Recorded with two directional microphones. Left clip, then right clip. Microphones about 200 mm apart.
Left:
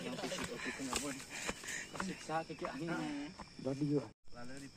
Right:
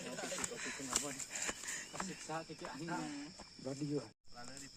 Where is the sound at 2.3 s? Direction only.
35° right (ahead or behind).